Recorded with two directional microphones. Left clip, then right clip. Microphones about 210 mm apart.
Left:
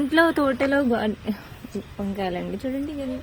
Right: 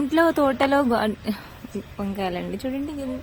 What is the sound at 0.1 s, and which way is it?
A woman's voice, 5° right (ahead or behind).